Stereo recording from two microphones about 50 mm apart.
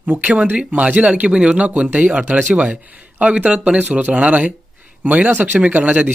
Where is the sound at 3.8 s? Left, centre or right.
Right.